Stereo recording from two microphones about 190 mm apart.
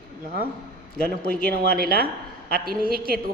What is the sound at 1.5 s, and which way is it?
A man's voice, 55° right (ahead or behind).